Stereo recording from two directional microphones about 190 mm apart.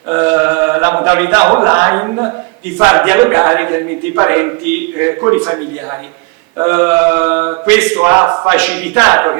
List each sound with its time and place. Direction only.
0.1 s mantra: 15° right (ahead or behind)
6.6 s mantra: 15° right (ahead or behind)